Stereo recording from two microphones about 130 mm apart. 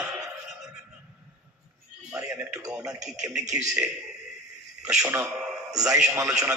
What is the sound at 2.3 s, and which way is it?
Speech, 15° right (ahead or behind).